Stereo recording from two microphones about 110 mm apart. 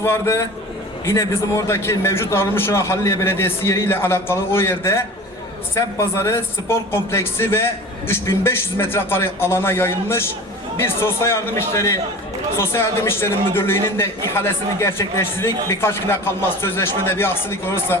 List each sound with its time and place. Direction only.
0.0 s a man's voice: 25° left (ahead or behind)